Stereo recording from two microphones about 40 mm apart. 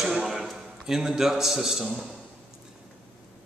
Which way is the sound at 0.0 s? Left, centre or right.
Centre.